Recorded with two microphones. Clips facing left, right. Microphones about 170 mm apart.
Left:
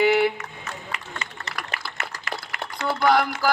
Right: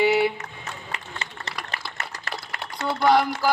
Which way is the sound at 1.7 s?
35° right (ahead or behind).